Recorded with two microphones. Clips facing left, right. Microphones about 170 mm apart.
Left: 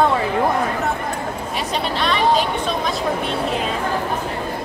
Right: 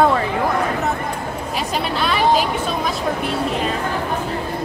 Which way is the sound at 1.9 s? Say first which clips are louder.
Right 1 dB; 5° right (ahead or behind).